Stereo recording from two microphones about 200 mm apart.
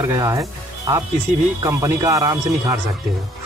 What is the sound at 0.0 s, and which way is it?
Speech, 15° right (ahead or behind).